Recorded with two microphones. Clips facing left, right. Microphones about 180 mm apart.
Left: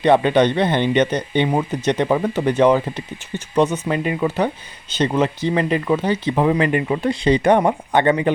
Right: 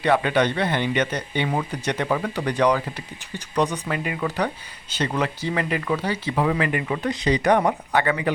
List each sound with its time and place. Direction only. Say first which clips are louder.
0.0 s speech: left 6 dB; 25° left (ahead or behind)